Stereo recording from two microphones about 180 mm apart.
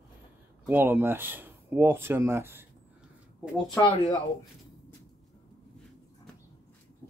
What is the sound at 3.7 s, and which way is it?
Speech, 25° left (ahead or behind).